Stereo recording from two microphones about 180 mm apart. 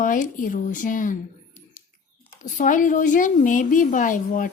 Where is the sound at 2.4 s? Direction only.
45° left (ahead or behind).